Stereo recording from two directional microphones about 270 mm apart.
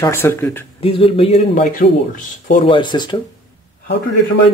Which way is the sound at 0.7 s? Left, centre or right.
Left.